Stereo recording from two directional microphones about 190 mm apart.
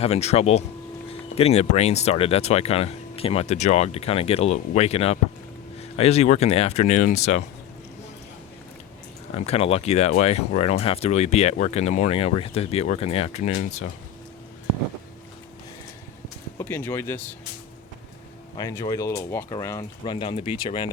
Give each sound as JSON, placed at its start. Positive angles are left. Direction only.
{"t": 0.0, "sound": "speech", "side_deg": 35}
{"t": 9.3, "sound": "speech", "side_deg": 30}
{"t": 16.6, "sound": "speech", "side_deg": 10}
{"t": 18.5, "sound": "speech", "side_deg": 20}
{"t": 20.1, "sound": "speech", "side_deg": 30}